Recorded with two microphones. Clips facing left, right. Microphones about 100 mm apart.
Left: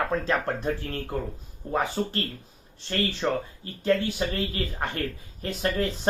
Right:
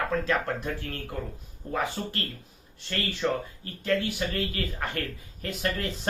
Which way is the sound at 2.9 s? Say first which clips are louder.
Left 2 dB; 30° left (ahead or behind).